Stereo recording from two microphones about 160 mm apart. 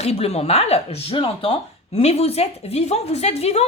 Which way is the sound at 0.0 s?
40° left (ahead or behind).